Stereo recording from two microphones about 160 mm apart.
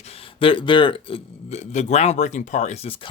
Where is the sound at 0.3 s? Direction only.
35° left (ahead or behind).